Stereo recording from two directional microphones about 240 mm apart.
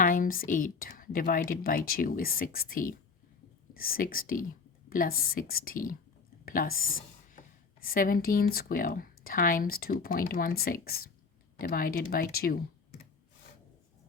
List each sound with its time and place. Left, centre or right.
0.0 s speech: left